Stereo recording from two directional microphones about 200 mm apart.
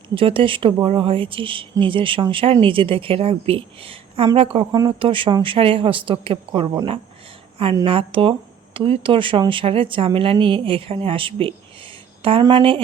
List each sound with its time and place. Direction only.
0.1 s speech: 25° right (ahead or behind)